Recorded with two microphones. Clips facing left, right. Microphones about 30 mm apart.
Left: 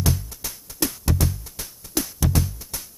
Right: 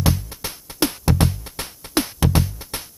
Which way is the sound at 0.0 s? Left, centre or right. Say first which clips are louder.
Right 3 dB; right.